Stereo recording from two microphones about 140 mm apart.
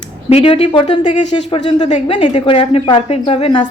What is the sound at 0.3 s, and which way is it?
Speech, 45° left (ahead or behind).